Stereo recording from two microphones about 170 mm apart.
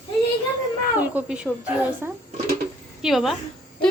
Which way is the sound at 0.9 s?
10° right (ahead or behind).